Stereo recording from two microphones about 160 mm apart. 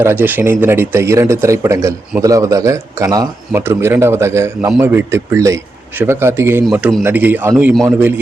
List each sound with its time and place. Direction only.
0.0 s a man's voice: 10° right (ahead or behind)